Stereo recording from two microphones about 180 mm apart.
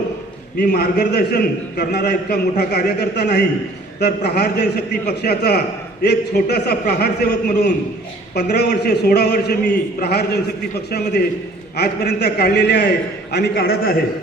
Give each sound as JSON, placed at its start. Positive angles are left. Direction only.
{"t": 0.7, "sound": "a man's voice", "side_deg": 65}
{"t": 11.8, "sound": "a man's voice", "side_deg": 65}